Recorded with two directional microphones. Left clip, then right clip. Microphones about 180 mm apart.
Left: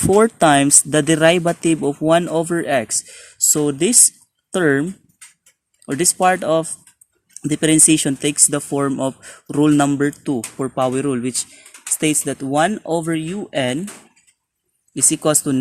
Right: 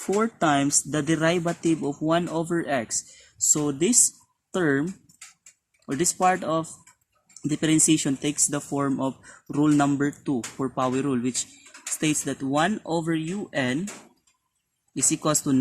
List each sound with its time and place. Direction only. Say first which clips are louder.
0.1 s speech: left 10 dB; 55° left (ahead or behind); by 13.7 s 35° left (ahead or behind)
14.9 s speech: left 7 dB; 35° left (ahead or behind)